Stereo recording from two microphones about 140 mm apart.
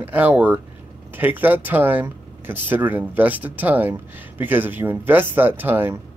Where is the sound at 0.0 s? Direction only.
10° right (ahead or behind).